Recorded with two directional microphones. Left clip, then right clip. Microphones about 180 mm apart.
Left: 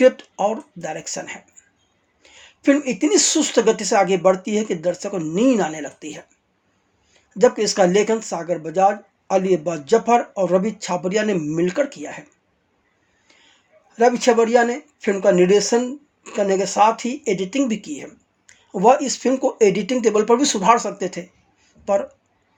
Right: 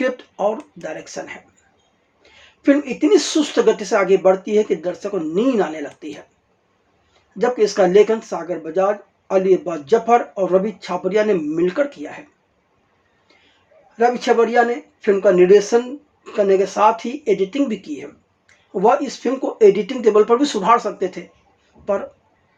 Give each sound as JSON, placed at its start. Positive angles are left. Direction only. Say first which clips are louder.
{"t": 0.0, "sound": "speech", "louder": "left 4 dB", "side_deg": 35}
{"t": 2.6, "sound": "speech", "louder": "right 2 dB", "side_deg": 35}
{"t": 7.3, "sound": "speech", "louder": "even", "side_deg": 35}
{"t": 13.9, "sound": "speech", "louder": "even", "side_deg": 35}